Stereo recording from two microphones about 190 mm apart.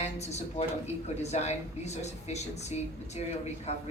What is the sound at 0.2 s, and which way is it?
Speech, 35° left (ahead or behind).